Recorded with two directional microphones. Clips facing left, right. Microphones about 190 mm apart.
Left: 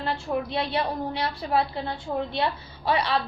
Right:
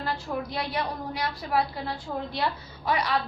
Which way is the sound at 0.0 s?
25° left (ahead or behind).